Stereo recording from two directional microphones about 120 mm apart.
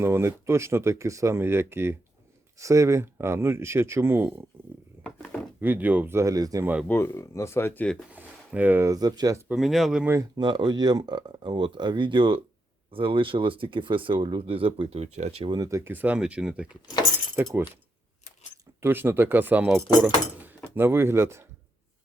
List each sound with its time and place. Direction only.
0.0 s speech: 20° right (ahead or behind)
5.0 s a sound: 5° left (ahead or behind)
5.5 s speech: 15° right (ahead or behind)
6.8 s speech: 20° left (ahead or behind)
8.1 s a sound: 15° right (ahead or behind)
8.9 s speech: 35° right (ahead or behind)
9.5 s speech: centre (ahead or behind)
10.3 s speech: 40° right (ahead or behind); by 15.4 s 65° right (ahead or behind)
15.4 s speech: 30° right (ahead or behind); by 16.7 s 10° right (ahead or behind)
17.3 s speech: 20° right (ahead or behind)
18.8 s speech: 15° right (ahead or behind)